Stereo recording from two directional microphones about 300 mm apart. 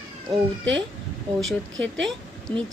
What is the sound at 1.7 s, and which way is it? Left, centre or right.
Speech, right.